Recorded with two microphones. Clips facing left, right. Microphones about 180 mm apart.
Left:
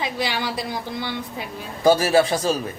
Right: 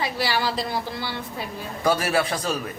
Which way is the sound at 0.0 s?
20° left (ahead or behind).